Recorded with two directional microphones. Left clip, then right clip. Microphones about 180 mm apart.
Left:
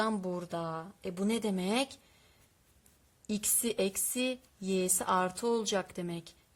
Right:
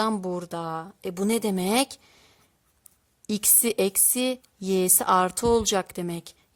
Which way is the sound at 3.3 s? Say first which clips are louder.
Right 9 dB; 40° right (ahead or behind).